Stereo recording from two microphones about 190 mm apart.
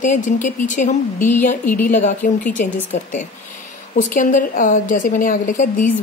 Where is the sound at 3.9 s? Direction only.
45° left (ahead or behind).